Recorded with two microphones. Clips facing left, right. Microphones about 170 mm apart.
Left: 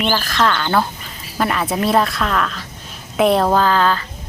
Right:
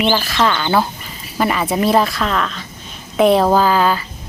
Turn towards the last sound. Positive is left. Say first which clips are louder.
# right 2 dB
turn(degrees=-10)  # may be behind; listen again after turning